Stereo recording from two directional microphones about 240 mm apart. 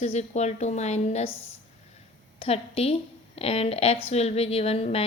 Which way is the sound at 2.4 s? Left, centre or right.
Left.